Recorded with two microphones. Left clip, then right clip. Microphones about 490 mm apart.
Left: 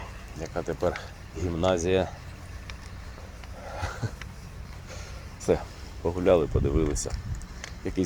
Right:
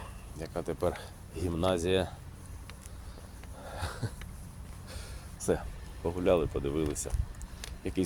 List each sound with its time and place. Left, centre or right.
0.3 s speech: right
3.8 s a sound: right
5.4 s speech: right